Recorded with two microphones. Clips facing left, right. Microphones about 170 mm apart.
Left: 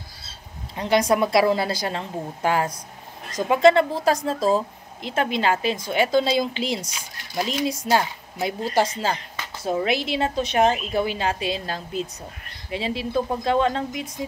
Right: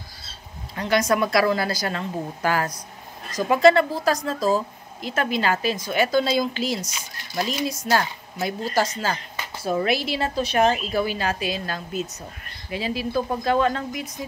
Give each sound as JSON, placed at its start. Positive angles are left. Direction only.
{"t": 0.7, "sound": "speech", "side_deg": 25}
{"t": 6.9, "sound": "speech", "side_deg": 10}
{"t": 7.6, "sound": "speech", "side_deg": 25}